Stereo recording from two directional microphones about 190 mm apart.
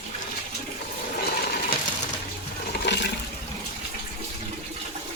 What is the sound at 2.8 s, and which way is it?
Toilet flush, 65° left (ahead or behind).